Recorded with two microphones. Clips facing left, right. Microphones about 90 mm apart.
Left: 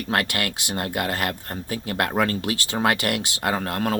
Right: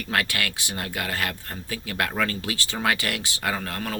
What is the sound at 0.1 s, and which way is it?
Speech, 50° left (ahead or behind).